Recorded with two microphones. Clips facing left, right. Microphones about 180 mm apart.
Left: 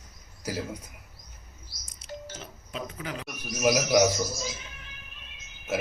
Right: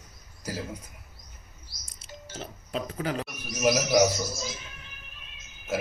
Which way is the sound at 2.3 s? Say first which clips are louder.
Right 5 dB; 35° right (ahead or behind).